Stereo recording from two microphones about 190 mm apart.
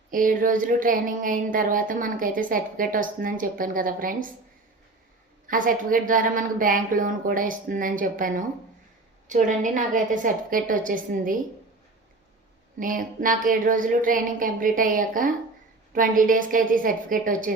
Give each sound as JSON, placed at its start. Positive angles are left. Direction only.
{"t": 0.1, "sound": "speech", "side_deg": -45}
{"t": 5.5, "sound": "speech", "side_deg": -45}
{"t": 12.8, "sound": "speech", "side_deg": -45}